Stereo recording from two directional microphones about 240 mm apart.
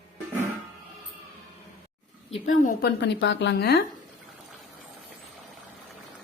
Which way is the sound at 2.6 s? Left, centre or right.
Left.